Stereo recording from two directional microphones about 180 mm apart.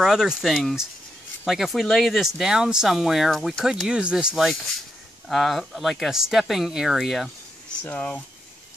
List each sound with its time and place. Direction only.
0.0 s speech: 5° right (ahead or behind)